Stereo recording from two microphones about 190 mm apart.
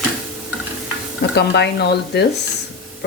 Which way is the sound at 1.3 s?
60° left (ahead or behind).